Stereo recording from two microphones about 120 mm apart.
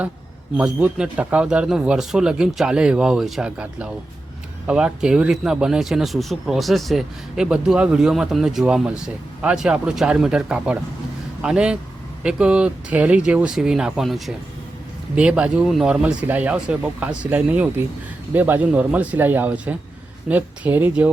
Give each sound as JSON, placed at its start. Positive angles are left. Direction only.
{"t": 0.5, "sound": "speech", "side_deg": -10}